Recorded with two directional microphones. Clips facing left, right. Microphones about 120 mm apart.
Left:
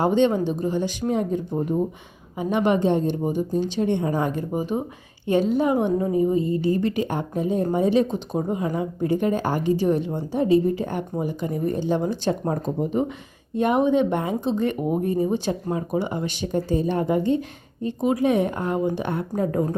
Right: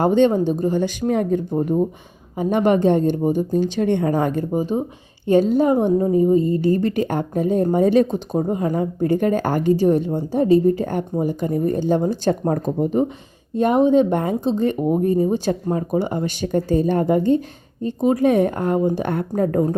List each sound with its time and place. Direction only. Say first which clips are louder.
0.0 s a woman's voice: right 4 dB; 45° right (ahead or behind)
2.4 s a woman's voice: right 4 dB; 45° right (ahead or behind)
3.8 s a woman's voice: right 3 dB; 60° right (ahead or behind)
4.5 s a woman's voice: right 4 dB; 30° right (ahead or behind); by 9.7 s 50° right (ahead or behind)
9.7 s a woman's voice: right 4 dB; 40° right (ahead or behind)
14.5 s a woman's voice: right 4 dB; 35° right (ahead or behind)